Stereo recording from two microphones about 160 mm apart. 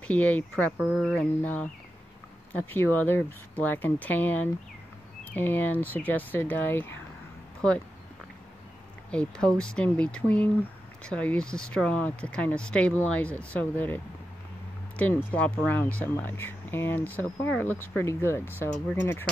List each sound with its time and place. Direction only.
0.0 s speech: 10° left (ahead or behind)
0.7 s speech: 5° right (ahead or behind)
1.1 s speech: 10° left (ahead or behind)
9.1 s speech: 5° left (ahead or behind)
15.3 s speech: 10° left (ahead or behind)